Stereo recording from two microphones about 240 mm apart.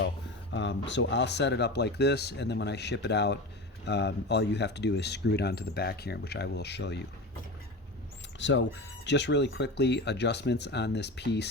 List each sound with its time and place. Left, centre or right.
0.5 s speech: left
8.4 s speech: left